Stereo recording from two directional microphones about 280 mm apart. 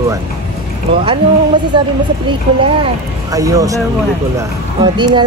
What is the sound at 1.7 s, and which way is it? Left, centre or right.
Speech, centre.